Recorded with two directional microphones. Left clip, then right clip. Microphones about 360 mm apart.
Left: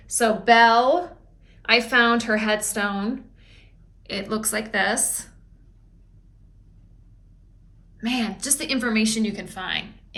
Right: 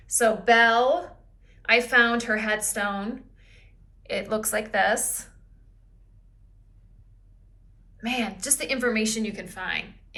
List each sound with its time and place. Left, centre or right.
0.0 s a woman's voice: centre
8.0 s a woman's voice: centre